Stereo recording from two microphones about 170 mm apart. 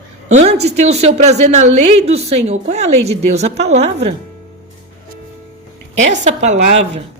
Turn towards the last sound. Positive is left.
turn(degrees=-45)  # may be behind; listen again after turning